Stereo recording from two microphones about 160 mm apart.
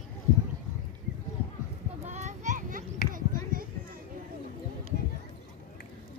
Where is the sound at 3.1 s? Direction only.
60° right (ahead or behind).